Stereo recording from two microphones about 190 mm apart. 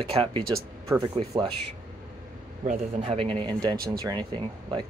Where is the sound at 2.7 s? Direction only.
30° right (ahead or behind).